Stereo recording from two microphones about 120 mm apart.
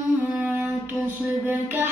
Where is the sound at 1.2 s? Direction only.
20° right (ahead or behind).